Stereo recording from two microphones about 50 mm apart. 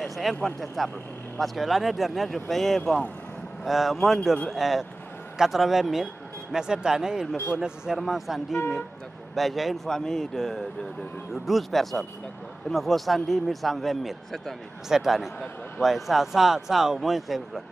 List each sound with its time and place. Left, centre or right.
0.0 s speech: centre
6.5 s a man's voice: centre
7.3 s speech: left
7.6 s a man's voice: centre
9.8 s speech: centre
14.9 s speech: centre